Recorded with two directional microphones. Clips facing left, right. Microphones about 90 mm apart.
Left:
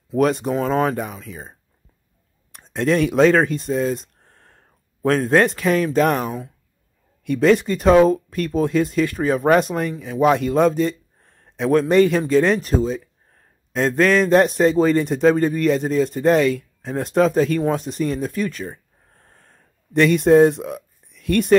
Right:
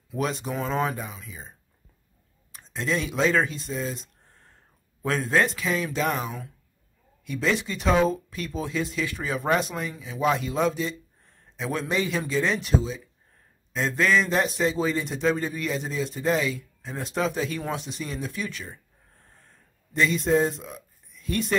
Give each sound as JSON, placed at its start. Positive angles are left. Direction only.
{"t": 0.2, "sound": "speech", "side_deg": 55}
{"t": 2.5, "sound": "a man's voice", "side_deg": 55}